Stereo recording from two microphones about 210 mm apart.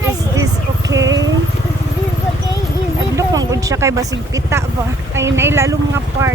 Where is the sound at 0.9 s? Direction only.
60° right (ahead or behind).